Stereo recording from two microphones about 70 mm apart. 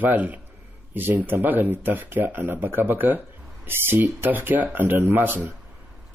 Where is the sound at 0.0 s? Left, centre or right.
Right.